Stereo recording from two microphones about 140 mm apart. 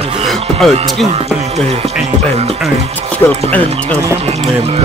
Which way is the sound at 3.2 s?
15° left (ahead or behind).